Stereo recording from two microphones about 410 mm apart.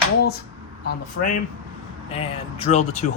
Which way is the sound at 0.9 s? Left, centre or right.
Centre.